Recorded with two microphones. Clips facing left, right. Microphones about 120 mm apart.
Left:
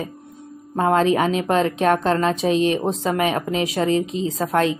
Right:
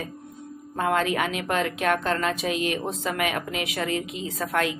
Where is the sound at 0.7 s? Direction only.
30° left (ahead or behind).